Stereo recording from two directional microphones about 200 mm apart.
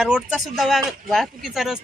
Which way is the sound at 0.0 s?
5° right (ahead or behind).